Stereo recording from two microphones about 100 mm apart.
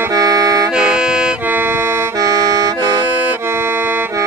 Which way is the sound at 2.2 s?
35° right (ahead or behind).